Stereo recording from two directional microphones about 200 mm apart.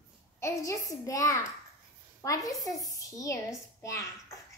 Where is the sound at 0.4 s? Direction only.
15° left (ahead or behind).